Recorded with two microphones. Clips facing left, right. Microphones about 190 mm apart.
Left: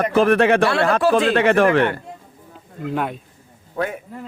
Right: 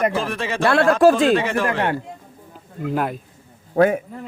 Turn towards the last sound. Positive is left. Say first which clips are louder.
# right 9 dB
turn(degrees=-60)  # may be behind; listen again after turning